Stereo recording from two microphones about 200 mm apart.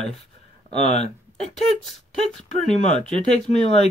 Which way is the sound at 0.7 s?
25° right (ahead or behind).